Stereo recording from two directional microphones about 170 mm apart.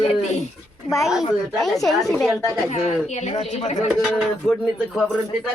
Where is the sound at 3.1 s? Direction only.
40° left (ahead or behind).